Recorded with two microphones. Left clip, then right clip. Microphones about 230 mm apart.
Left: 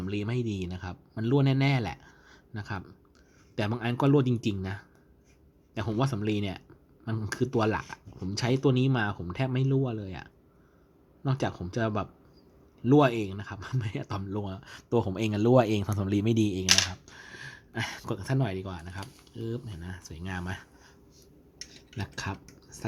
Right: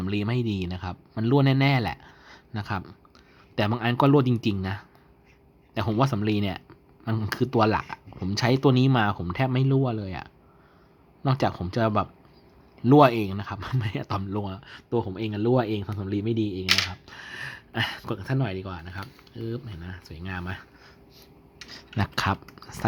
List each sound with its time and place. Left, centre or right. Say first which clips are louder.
0.0 s speech: right 4 dB; centre
17.1 s speech: right 7 dB; centre
21.9 s speech: right 11 dB; centre